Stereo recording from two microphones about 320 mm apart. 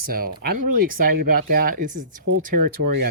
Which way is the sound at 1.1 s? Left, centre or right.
Right.